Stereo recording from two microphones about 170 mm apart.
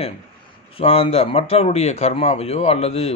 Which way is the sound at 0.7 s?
35° left (ahead or behind).